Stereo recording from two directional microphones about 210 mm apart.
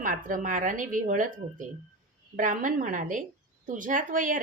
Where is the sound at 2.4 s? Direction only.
40° right (ahead or behind).